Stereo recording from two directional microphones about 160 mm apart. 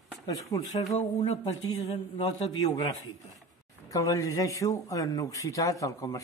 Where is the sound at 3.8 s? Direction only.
20° left (ahead or behind).